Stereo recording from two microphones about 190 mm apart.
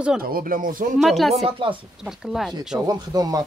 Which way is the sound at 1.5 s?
25° right (ahead or behind).